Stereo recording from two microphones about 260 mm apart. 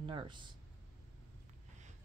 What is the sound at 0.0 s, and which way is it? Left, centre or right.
Speech, centre.